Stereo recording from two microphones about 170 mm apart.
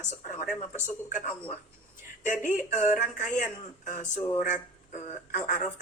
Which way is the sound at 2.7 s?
45° left (ahead or behind).